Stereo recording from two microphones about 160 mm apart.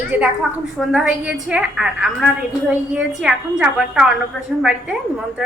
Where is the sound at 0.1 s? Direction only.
10° right (ahead or behind).